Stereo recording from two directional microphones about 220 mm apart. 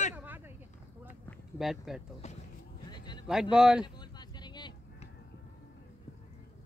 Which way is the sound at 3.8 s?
20° left (ahead or behind).